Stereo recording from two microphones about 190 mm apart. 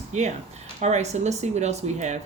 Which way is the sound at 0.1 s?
35° right (ahead or behind).